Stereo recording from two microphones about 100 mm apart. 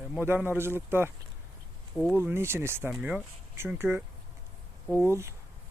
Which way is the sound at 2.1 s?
25° right (ahead or behind).